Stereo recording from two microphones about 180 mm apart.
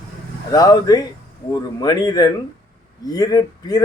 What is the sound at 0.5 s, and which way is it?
A man's voice, 20° left (ahead or behind).